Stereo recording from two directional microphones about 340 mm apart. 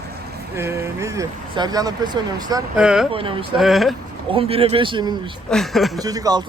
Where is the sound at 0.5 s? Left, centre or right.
Centre.